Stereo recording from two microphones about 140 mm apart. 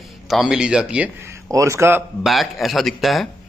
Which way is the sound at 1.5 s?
20° right (ahead or behind).